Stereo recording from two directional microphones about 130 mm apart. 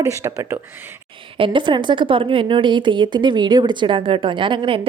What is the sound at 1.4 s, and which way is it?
Speech, 40° right (ahead or behind).